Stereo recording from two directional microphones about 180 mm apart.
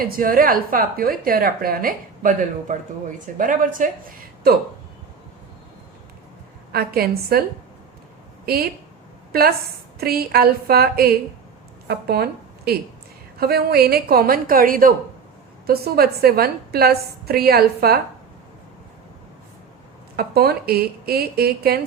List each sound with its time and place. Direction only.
0.0 s a woman's voice: 50° right (ahead or behind)
6.7 s a woman's voice: 60° right (ahead or behind)
8.4 s a woman's voice: 60° right (ahead or behind)
20.1 s a woman's voice: 60° right (ahead or behind)